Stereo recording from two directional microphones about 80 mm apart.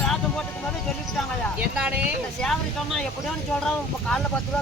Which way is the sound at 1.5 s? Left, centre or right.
Centre.